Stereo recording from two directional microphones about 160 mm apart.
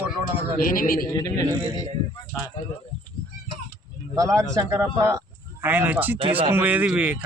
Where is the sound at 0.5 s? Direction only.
60° left (ahead or behind).